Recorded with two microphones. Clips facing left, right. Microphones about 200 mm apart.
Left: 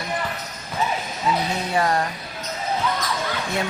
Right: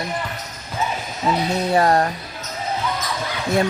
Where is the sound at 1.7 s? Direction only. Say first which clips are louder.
Right 5 dB; 40° right (ahead or behind).